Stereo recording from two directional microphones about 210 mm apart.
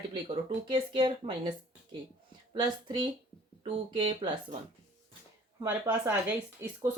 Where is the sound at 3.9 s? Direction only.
20° right (ahead or behind).